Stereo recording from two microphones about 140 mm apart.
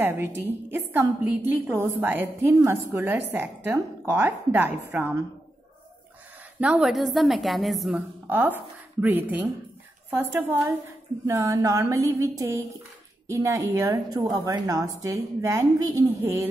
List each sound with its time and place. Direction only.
0.0 s a woman's voice: 15° right (ahead or behind)
6.6 s a woman's voice: 5° right (ahead or behind)
8.3 s a woman's voice: 15° right (ahead or behind)